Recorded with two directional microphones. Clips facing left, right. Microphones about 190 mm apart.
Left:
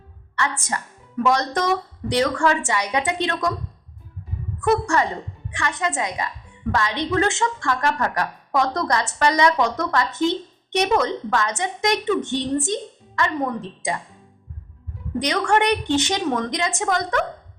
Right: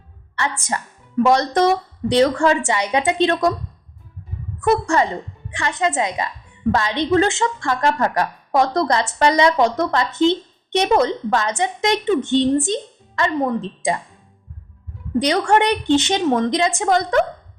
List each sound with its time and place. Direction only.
1.2 s a woman's voice: 30° right (ahead or behind)
4.6 s a woman's voice: 30° right (ahead or behind)
15.2 s a woman's voice: 30° right (ahead or behind)